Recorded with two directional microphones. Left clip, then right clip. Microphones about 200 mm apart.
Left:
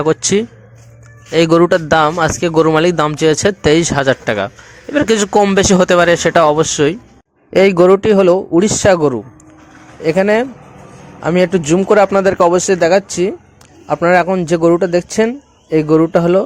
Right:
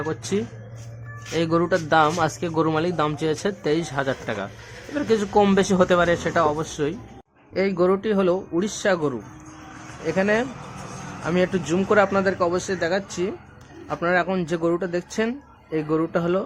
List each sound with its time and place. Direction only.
0.0 s a man's voice: 30° left (ahead or behind)